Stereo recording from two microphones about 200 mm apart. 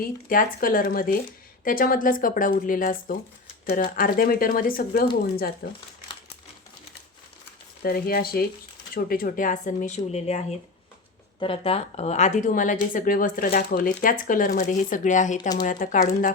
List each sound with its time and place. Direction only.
0.0 s speech: 45° left (ahead or behind)
7.8 s a woman's voice: 50° left (ahead or behind)
15.4 s speech: 20° left (ahead or behind)
15.6 s a woman's voice: 40° left (ahead or behind)